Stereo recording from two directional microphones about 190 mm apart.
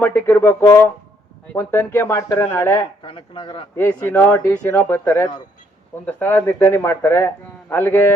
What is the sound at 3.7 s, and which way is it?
A man's voice, 10° left (ahead or behind).